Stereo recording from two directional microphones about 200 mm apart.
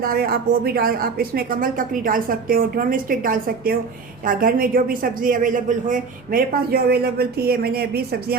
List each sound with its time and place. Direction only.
0.0 s speech: 50° right (ahead or behind)